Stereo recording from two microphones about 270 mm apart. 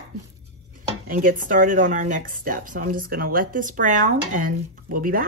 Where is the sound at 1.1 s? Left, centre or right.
Right.